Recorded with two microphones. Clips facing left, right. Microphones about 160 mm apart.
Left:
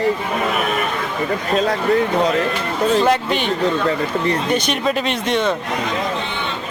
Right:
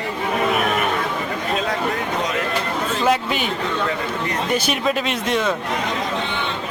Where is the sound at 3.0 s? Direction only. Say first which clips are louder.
Left 2 dB; 5° right (ahead or behind).